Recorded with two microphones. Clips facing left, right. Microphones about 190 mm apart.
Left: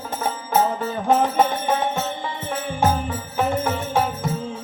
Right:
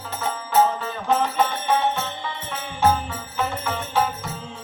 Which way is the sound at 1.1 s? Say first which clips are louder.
Left 3 dB; 50° left (ahead or behind).